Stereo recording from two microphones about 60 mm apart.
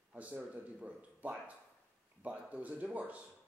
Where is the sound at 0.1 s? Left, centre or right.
Right.